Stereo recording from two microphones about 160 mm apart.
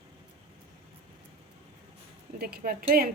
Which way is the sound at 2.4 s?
65° right (ahead or behind).